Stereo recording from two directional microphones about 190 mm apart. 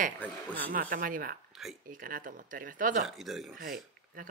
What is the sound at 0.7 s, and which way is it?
Speech, 45° right (ahead or behind).